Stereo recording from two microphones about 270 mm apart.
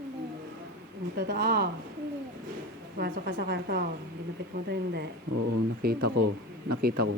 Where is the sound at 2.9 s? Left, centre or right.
Right.